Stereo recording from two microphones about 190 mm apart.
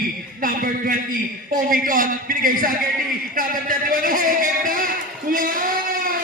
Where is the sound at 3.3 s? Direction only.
45° right (ahead or behind).